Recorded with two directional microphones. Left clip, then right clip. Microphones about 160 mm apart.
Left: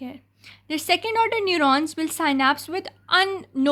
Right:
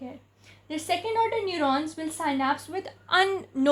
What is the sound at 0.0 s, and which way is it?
A woman's voice, 25° left (ahead or behind).